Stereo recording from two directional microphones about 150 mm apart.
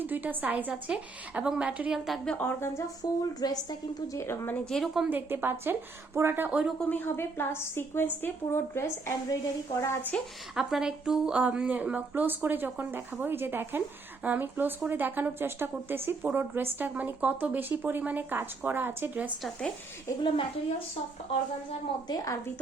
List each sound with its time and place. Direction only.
0.0 s speech: 10° right (ahead or behind)
5.0 s speech: 15° right (ahead or behind)
6.7 s speech: 15° left (ahead or behind)
10.5 s speech: 5° right (ahead or behind)
19.4 s speech: 5° left (ahead or behind)
20.2 s a woman's voice: 35° left (ahead or behind)
22.1 s a woman's voice: 20° left (ahead or behind)